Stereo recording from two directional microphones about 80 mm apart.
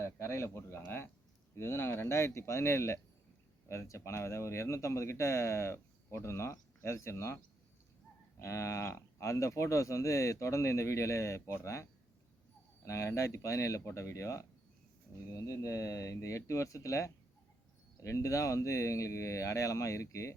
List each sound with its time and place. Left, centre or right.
0.0 s speech: left
8.4 s speech: left